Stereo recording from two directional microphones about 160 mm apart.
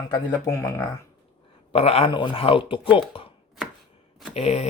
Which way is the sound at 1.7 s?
40° left (ahead or behind).